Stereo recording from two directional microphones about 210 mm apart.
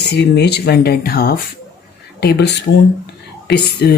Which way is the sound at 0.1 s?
55° left (ahead or behind).